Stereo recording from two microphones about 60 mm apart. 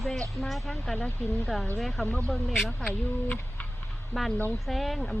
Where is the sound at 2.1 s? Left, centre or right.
Left.